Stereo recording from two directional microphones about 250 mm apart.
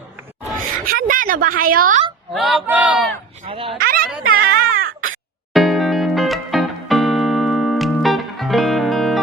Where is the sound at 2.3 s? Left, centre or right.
Centre.